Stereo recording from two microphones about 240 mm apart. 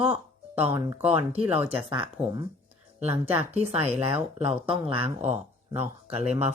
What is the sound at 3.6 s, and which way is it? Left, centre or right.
Speech, right.